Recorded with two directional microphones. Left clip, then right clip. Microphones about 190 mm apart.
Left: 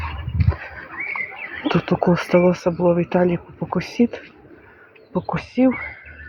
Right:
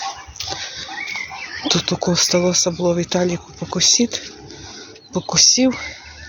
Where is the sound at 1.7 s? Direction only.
20° left (ahead or behind); by 5.9 s 5° right (ahead or behind).